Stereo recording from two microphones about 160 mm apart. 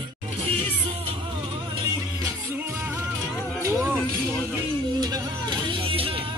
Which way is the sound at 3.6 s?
15° right (ahead or behind).